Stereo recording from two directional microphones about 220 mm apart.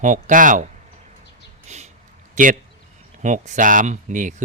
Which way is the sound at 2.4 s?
35° right (ahead or behind).